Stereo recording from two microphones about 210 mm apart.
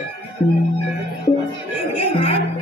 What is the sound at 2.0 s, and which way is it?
Music, 30° left (ahead or behind).